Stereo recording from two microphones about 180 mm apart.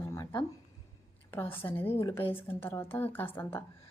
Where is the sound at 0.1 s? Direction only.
20° left (ahead or behind).